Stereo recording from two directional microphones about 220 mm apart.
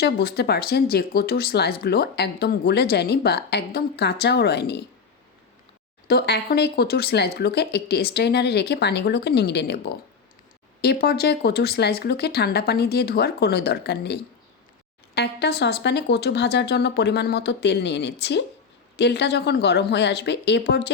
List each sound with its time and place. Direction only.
0.0 s speech: 45° left (ahead or behind)
6.1 s speech: 45° left (ahead or behind)
11.0 s speech: 45° left (ahead or behind)